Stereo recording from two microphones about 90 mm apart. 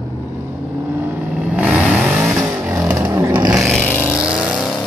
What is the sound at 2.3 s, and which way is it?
Vehicle, 30° right (ahead or behind).